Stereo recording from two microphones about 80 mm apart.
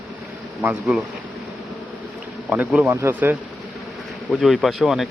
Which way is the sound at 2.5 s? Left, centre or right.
Centre.